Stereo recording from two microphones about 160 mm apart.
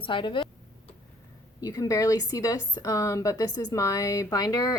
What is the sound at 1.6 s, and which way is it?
A woman's voice, 20° left (ahead or behind).